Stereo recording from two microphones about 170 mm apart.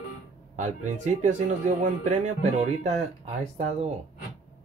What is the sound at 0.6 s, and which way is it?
Speech, 45° right (ahead or behind).